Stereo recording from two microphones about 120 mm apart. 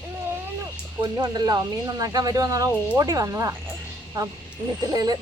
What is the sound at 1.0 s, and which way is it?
Speech, 35° right (ahead or behind).